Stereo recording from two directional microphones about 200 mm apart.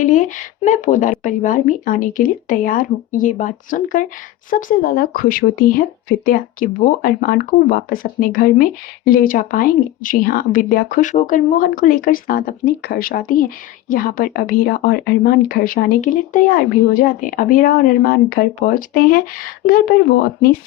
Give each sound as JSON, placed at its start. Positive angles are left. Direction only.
{"t": 0.0, "sound": "speech", "side_deg": 40}